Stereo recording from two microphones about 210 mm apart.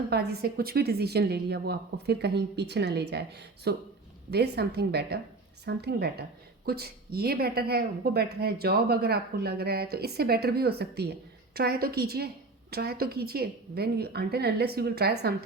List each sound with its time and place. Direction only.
0.1 s speech: 50° right (ahead or behind)